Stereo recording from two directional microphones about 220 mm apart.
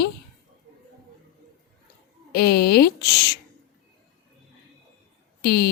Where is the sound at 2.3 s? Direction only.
45° left (ahead or behind).